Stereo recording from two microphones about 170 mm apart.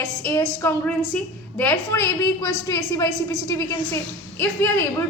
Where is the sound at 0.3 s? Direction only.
15° left (ahead or behind).